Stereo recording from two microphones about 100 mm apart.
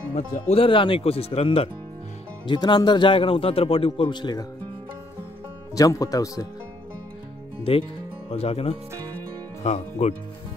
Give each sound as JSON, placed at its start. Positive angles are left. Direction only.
{"t": 0.5, "sound": "speech", "side_deg": 65}
{"t": 2.4, "sound": "speech", "side_deg": 50}
{"t": 5.8, "sound": "speech", "side_deg": 35}
{"t": 7.7, "sound": "speech", "side_deg": 70}
{"t": 8.3, "sound": "speech", "side_deg": 90}